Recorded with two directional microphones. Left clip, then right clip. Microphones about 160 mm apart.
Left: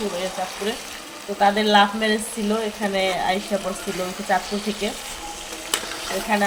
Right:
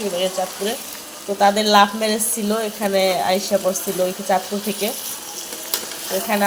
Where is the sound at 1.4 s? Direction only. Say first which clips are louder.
Right 2 dB; 30° right (ahead or behind).